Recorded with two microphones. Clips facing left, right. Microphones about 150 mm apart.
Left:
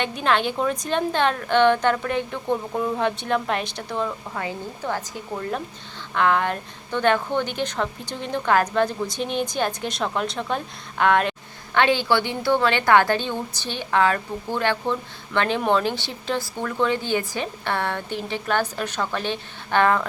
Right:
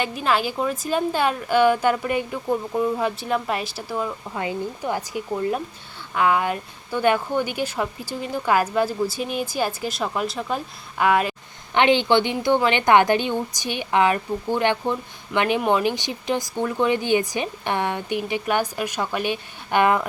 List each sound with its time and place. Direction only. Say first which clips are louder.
0.0 s a woman's voice: even; 5° right (ahead or behind)
4.4 s a woman's voice: right 6 dB; 15° right (ahead or behind)
11.7 s a woman's voice: right 2 dB; 20° right (ahead or behind)